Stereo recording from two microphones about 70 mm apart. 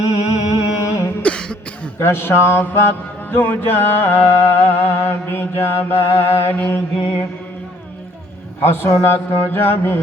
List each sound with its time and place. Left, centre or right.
0.0 s music: left
1.2 s cough: centre
2.0 s music: left
8.6 s music: left